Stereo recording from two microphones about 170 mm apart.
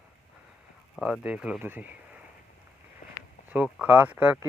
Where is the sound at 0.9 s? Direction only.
5° left (ahead or behind).